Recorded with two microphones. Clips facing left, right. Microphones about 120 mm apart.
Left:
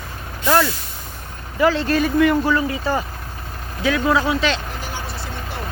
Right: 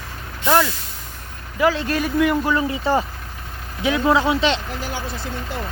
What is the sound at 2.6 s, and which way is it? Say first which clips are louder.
Speech: right 2 dB; 25° right (ahead or behind).